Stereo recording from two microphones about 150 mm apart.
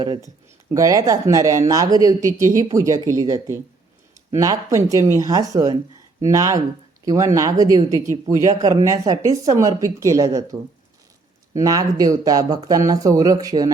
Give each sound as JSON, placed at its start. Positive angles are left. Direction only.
{"t": 0.0, "sound": "speech", "side_deg": -25}
{"t": 8.1, "sound": "speech", "side_deg": -50}
{"t": 8.6, "sound": "speech", "side_deg": -20}
{"t": 11.5, "sound": "speech", "side_deg": -25}